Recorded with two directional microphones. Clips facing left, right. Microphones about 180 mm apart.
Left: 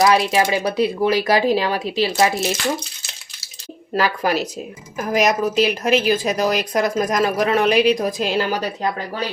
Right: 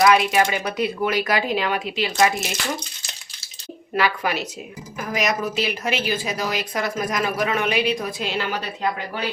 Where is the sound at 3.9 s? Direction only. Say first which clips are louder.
Left 3 dB; 40° left (ahead or behind).